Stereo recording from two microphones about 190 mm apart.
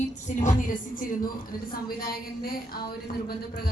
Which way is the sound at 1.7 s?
50° left (ahead or behind).